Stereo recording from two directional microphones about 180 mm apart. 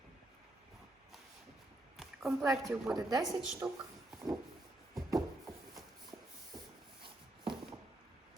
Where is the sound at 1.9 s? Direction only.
Centre (ahead or behind).